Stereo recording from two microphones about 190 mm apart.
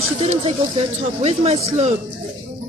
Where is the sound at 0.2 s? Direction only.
30° right (ahead or behind).